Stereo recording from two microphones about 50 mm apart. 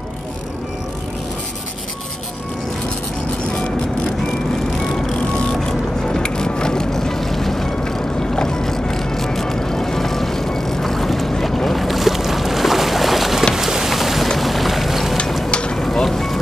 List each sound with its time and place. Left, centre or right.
5.4 s vehicle: centre
13.6 s rain: centre
14.3 s music: centre
15.5 s a sound: centre
15.8 s music: centre